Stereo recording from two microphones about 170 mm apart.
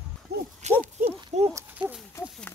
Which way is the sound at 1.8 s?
10° right (ahead or behind).